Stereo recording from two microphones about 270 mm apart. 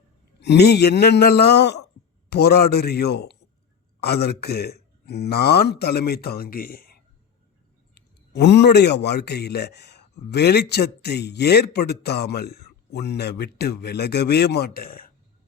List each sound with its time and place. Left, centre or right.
0.3 s a man's voice: left